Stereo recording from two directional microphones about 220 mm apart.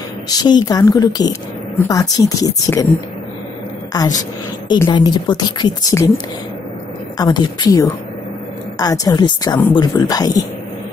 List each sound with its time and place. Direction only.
0.3 s a woman's voice: 20° left (ahead or behind)
3.9 s a woman's voice: 15° left (ahead or behind)